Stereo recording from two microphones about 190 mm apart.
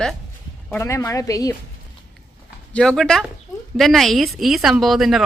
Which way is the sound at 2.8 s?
5° left (ahead or behind).